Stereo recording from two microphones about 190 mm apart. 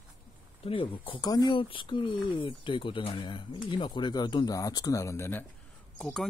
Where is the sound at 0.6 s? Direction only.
25° left (ahead or behind); by 5.5 s 10° left (ahead or behind).